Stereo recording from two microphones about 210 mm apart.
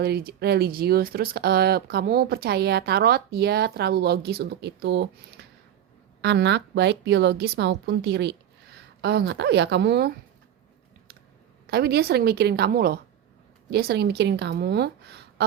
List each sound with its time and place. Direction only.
0.0 s speech: 45° right (ahead or behind)
11.6 s a woman's voice: 50° right (ahead or behind)